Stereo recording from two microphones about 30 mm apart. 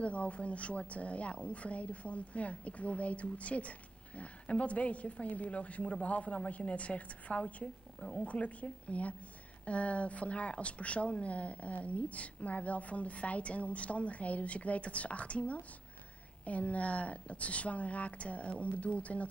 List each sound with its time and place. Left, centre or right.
0.0 s a woman's voice: left